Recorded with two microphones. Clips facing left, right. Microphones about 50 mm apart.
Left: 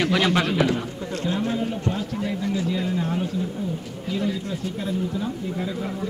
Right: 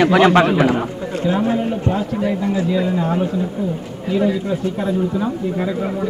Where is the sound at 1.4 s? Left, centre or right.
Right.